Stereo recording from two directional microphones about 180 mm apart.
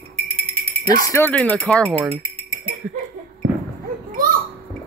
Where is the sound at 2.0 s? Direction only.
30° right (ahead or behind).